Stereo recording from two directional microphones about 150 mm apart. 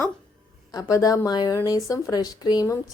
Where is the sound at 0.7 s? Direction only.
20° left (ahead or behind).